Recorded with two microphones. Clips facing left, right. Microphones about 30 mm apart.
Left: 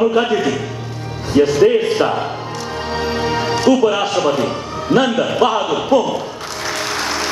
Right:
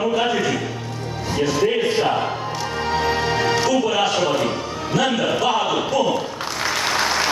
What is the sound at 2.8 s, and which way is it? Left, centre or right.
Music, centre.